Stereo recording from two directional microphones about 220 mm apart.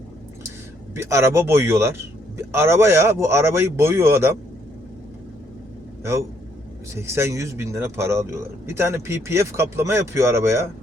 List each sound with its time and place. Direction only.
0.9 s speech: 10° right (ahead or behind)
6.9 s speech: 10° right (ahead or behind)